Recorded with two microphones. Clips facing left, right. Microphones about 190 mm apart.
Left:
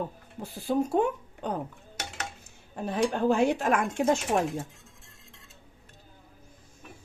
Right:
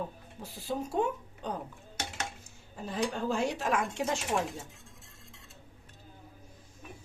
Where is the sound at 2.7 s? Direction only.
65° left (ahead or behind).